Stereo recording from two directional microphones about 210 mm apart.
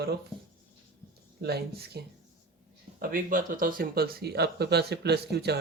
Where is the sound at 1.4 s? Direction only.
50° right (ahead or behind).